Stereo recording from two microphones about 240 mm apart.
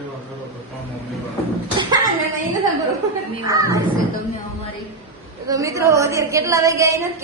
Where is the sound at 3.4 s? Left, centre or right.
Centre.